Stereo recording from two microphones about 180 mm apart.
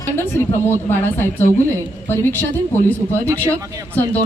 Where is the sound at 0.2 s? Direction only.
15° left (ahead or behind).